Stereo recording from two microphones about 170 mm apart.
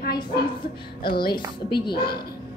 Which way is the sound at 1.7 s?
70° left (ahead or behind).